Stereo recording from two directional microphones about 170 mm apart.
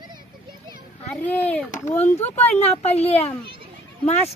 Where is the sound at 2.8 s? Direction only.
40° left (ahead or behind).